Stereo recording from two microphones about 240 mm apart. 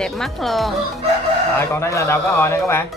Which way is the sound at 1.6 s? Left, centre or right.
Centre.